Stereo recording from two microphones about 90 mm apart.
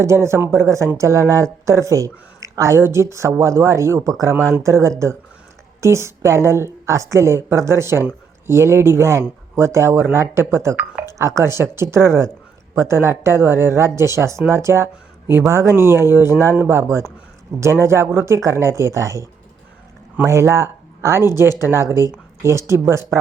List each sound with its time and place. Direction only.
0.0 s speech: 30° right (ahead or behind)